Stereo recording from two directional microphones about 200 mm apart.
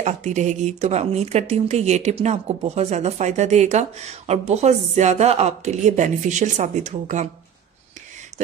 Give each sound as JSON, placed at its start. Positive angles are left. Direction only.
{"t": 0.0, "sound": "speech", "side_deg": -35}